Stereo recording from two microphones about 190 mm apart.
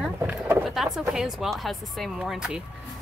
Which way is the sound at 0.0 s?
5° right (ahead or behind).